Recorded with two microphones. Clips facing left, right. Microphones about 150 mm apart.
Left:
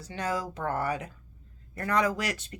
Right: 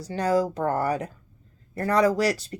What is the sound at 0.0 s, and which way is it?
Speech, 35° right (ahead or behind).